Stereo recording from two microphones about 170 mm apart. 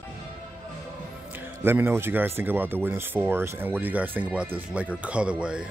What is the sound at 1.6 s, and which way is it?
Speech, 10° right (ahead or behind).